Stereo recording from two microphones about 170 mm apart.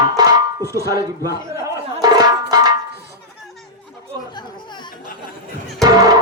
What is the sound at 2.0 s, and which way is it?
Music, 25° right (ahead or behind).